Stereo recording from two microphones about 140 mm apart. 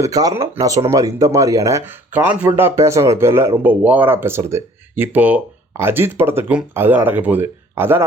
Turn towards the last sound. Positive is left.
turn(degrees=-15)  # may be behind; listen again after turning